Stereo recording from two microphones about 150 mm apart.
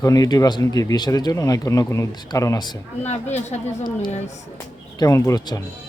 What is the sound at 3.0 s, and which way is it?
Speech, 45° left (ahead or behind).